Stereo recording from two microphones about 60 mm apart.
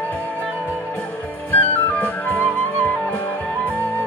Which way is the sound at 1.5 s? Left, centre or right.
Left.